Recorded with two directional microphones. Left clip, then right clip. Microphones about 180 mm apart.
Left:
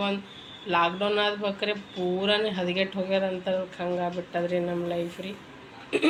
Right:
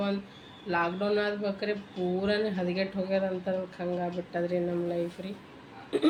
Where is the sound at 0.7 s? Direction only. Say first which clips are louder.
Left 4 dB; 5° right (ahead or behind).